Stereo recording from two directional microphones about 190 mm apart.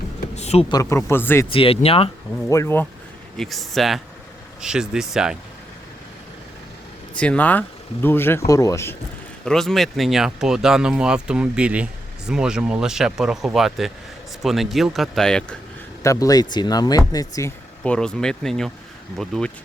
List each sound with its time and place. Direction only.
0.3 s a sound: 35° left (ahead or behind)
0.7 s speech: 15° left (ahead or behind)
1.5 s speech: 30° left (ahead or behind)
2.5 s speech: 15° left (ahead or behind)
3.3 s speech: centre (ahead or behind)
7.2 s speech: 5° left (ahead or behind)
9.4 s speech: 5° left (ahead or behind)
16.0 s speech: 20° left (ahead or behind)
17.8 s speech: 5° left (ahead or behind)